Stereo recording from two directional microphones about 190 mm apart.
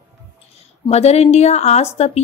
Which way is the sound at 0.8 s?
35° left (ahead or behind).